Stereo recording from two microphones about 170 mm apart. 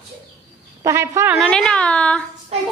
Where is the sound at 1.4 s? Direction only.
5° left (ahead or behind).